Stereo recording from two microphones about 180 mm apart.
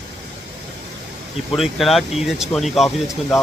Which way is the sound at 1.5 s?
Centre (ahead or behind).